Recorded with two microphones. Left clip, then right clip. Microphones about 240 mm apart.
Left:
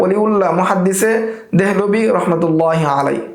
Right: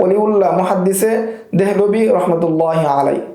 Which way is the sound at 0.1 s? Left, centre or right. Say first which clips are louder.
Right 1 dB; left.